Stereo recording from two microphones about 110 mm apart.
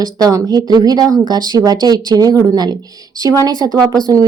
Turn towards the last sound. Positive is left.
turn(degrees=-35)  # may be behind; listen again after turning